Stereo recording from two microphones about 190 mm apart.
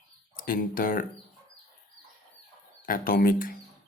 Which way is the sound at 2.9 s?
50° left (ahead or behind).